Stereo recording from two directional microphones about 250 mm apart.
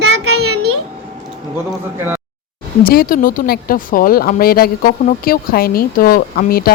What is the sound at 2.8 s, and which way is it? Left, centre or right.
Speech, left.